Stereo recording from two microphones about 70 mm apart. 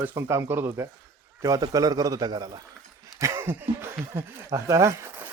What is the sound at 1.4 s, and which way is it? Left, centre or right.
A man's voice, right.